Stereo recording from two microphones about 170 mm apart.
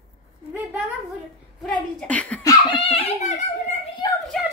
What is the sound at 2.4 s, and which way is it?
Giggle, 30° left (ahead or behind).